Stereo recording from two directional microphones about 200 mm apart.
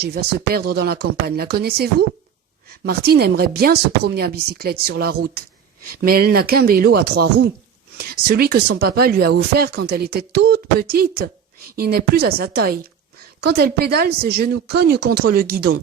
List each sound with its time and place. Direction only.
0.0 s a woman's voice: 55° right (ahead or behind)